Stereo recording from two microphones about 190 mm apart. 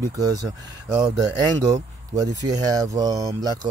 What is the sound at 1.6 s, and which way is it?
Speech, 20° right (ahead or behind).